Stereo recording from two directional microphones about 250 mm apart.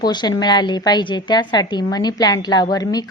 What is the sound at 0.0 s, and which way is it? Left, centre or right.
A woman's voice, centre.